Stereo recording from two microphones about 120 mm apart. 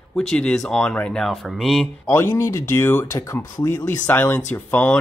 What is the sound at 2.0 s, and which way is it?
Speech, 20° left (ahead or behind).